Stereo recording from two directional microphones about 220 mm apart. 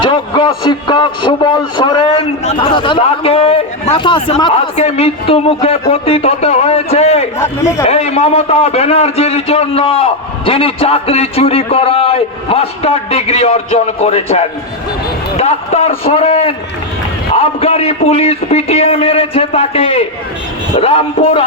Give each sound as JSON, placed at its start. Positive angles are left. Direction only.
{"t": 0.0, "sound": "a man's voice", "side_deg": 20}
{"t": 7.3, "sound": "a man's voice", "side_deg": 10}
{"t": 7.9, "sound": "a man's voice", "side_deg": 30}